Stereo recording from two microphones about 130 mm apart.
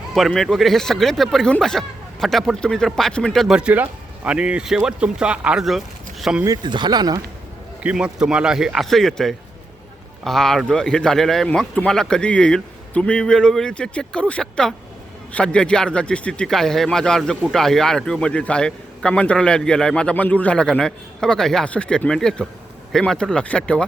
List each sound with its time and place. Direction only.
0.1 s speech: centre (ahead or behind)
6.4 s speech: 30° right (ahead or behind)
7.8 s a man's voice: 10° right (ahead or behind); by 23.8 s 10° left (ahead or behind)